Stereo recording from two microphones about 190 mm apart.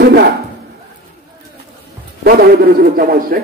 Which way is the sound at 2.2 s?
55° right (ahead or behind).